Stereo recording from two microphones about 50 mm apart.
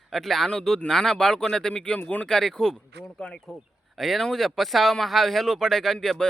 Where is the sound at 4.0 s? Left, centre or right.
Centre.